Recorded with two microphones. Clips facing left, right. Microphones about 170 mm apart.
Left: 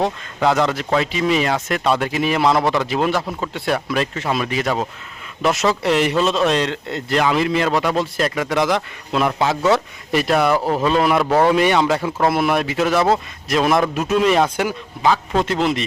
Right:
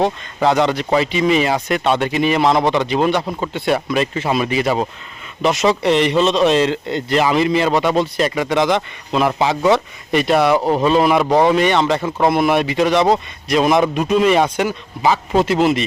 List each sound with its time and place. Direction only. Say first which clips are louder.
0.0 s speech: right 2 dB; centre (ahead or behind)
15.0 s speech: right 2 dB; 5° right (ahead or behind)